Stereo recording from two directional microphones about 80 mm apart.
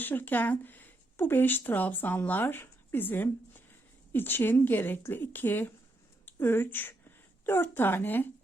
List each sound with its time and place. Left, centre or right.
0.0 s speech: left